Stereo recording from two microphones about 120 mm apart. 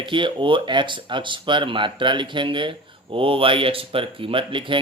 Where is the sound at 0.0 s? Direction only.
45° right (ahead or behind).